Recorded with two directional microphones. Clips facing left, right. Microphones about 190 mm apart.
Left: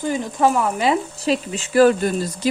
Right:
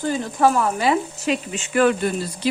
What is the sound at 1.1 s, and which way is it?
Speech, 35° left (ahead or behind).